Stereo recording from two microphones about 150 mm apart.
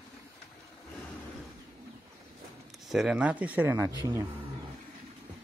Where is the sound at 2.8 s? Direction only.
5° right (ahead or behind).